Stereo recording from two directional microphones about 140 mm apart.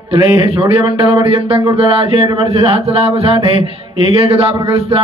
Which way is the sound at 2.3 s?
40° right (ahead or behind).